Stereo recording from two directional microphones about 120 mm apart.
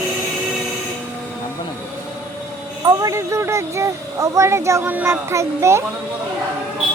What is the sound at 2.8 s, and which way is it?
Speech, 25° right (ahead or behind).